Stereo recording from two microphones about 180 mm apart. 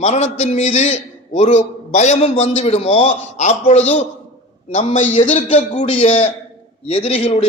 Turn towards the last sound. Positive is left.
turn(degrees=35)  # may be behind; listen again after turning